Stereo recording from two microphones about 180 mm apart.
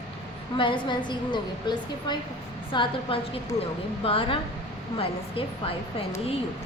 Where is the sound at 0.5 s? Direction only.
25° left (ahead or behind).